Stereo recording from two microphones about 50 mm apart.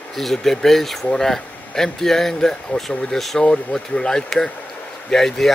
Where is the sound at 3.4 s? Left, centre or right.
Left.